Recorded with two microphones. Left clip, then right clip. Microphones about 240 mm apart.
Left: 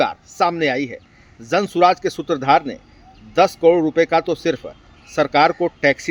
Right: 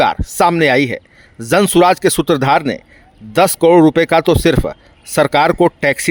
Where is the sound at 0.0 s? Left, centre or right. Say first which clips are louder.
Right 6 dB; right.